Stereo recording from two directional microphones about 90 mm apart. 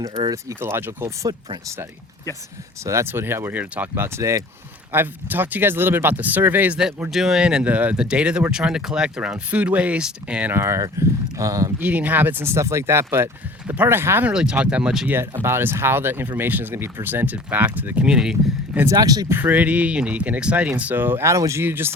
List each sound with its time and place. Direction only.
0.6 s speech: 25° right (ahead or behind)
2.8 s speech: 30° right (ahead or behind)
4.9 s speech: 20° right (ahead or behind)
7.1 s speech: 5° right (ahead or behind)
10.5 s speech: 30° right (ahead or behind)
11.8 s speech: 15° right (ahead or behind)
14.3 s speech: 10° right (ahead or behind)
15.4 s speech: 25° right (ahead or behind); by 18.3 s 10° right (ahead or behind)
18.9 s speech: 45° right (ahead or behind)
19.3 s speech: 20° right (ahead or behind)